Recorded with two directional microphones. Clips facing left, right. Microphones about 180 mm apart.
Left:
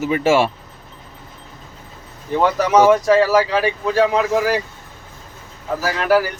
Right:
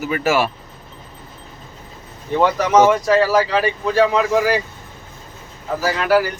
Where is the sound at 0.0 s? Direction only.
25° left (ahead or behind).